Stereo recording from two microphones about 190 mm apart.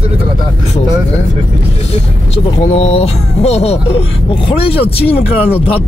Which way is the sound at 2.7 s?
35° left (ahead or behind).